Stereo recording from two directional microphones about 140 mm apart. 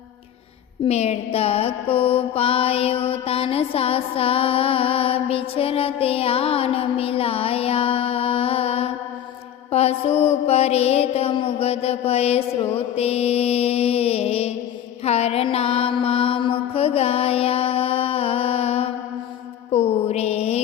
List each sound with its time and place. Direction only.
0.9 s mantra: 50° left (ahead or behind)